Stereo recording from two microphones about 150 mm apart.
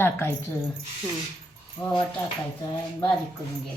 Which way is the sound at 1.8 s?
30° left (ahead or behind).